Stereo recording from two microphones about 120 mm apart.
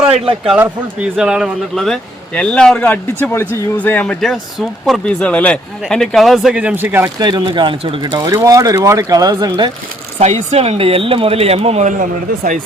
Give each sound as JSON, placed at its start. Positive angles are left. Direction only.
{"t": 0.4, "sound": "speech", "side_deg": -10}
{"t": 7.2, "sound": "speech", "side_deg": -35}
{"t": 8.1, "sound": "speech", "side_deg": -30}
{"t": 10.2, "sound": "speech", "side_deg": -65}